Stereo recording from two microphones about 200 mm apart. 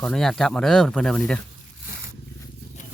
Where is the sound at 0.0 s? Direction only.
Centre (ahead or behind).